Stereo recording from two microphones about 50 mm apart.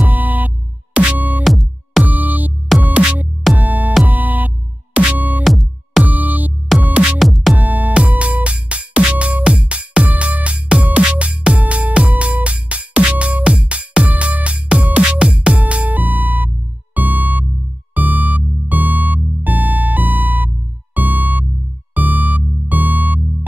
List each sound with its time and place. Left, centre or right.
0.0 s music: right
1.4 s music: centre
2.0 s music: right
5.4 s music: centre
6.0 s music: right
6.8 s music: right
7.2 s music: centre
7.5 s music: right; by 15.5 s centre
15.5 s music: right